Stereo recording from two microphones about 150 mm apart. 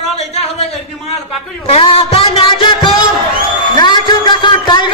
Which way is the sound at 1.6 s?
40° left (ahead or behind).